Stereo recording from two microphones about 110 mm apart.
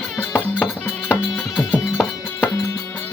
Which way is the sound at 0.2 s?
15° left (ahead or behind).